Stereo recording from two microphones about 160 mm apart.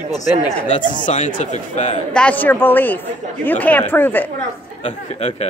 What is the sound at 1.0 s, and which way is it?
Speech, 50° left (ahead or behind).